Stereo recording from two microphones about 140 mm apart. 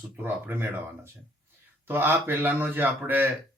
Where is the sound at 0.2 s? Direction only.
15° right (ahead or behind).